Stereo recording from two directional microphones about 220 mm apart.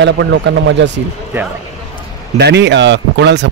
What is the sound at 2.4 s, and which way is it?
A man's voice, 50° right (ahead or behind).